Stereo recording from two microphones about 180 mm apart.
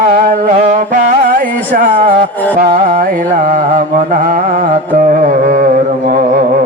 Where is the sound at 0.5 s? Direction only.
45° right (ahead or behind).